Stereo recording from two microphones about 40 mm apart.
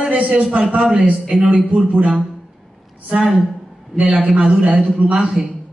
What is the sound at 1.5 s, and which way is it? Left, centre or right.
Speech, right.